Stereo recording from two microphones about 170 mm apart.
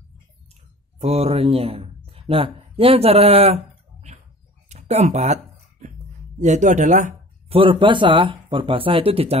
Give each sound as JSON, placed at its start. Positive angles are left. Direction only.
{"t": 0.9, "sound": "speech", "side_deg": -35}
{"t": 4.6, "sound": "a sound", "side_deg": -40}
{"t": 6.4, "sound": "speech", "side_deg": -45}
{"t": 7.5, "sound": "speech", "side_deg": -30}